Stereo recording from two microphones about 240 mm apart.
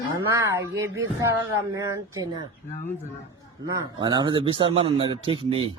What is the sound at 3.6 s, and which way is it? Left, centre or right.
Speech, centre.